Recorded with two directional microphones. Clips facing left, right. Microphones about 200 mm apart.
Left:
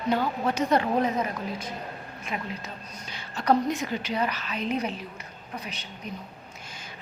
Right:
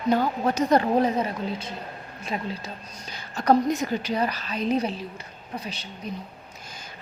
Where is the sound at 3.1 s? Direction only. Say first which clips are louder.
Right 3 dB; 40° right (ahead or behind).